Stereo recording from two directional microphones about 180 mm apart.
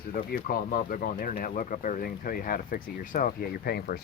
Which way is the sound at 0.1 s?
50° left (ahead or behind).